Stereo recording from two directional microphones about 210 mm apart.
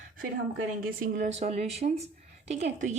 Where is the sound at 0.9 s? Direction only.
40° right (ahead or behind).